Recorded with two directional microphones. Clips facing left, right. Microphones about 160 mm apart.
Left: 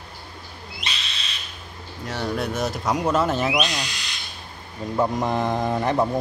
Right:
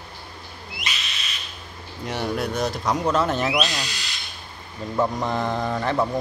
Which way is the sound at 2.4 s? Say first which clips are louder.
Right 1 dB; 5° left (ahead or behind).